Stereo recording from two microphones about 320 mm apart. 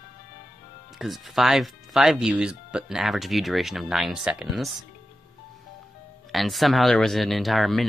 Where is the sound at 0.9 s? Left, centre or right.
Centre.